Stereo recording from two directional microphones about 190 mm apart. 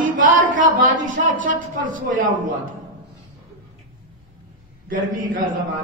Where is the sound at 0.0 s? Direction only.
45° right (ahead or behind).